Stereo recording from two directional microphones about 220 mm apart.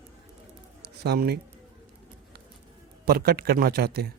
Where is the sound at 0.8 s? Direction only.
50° right (ahead or behind).